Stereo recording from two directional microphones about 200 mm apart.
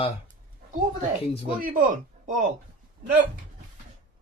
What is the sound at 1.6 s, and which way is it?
Speech, 45° right (ahead or behind).